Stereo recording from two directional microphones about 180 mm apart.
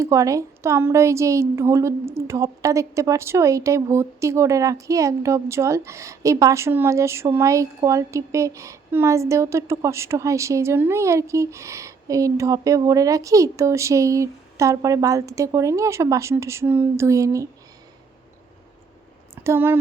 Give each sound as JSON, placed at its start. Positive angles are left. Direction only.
{"t": 0.0, "sound": "a woman's voice", "side_deg": -15}
{"t": 19.4, "sound": "speech", "side_deg": -15}